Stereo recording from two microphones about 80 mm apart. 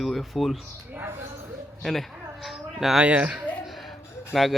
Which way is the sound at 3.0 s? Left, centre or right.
Centre.